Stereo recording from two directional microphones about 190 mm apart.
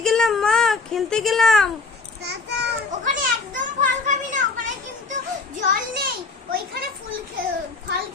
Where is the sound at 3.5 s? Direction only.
40° right (ahead or behind).